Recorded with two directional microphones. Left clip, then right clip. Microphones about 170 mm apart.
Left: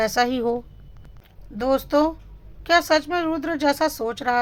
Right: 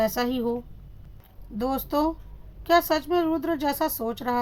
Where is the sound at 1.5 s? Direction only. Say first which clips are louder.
Left 6 dB; 15° left (ahead or behind).